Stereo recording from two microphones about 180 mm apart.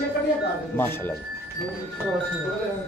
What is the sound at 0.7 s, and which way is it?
Speech, 10° left (ahead or behind).